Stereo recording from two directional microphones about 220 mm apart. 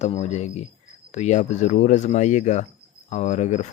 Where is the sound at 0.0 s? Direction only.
30° left (ahead or behind).